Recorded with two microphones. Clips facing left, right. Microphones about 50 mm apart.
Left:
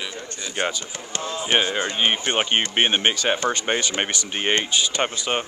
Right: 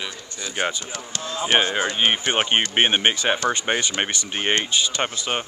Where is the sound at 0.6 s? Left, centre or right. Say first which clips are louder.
Even; centre.